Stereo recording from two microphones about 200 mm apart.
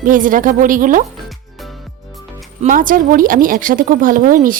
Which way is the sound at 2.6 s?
40° right (ahead or behind).